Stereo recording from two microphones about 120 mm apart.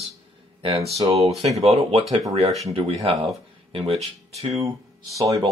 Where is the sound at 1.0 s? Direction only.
60° right (ahead or behind).